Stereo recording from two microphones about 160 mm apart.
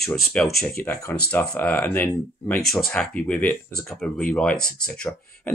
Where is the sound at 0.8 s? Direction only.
60° left (ahead or behind).